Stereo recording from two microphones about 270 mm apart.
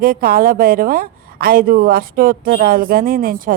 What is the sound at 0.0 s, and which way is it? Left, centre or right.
A woman's voice, right.